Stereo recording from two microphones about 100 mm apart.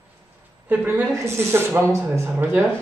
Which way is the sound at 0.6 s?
20° right (ahead or behind).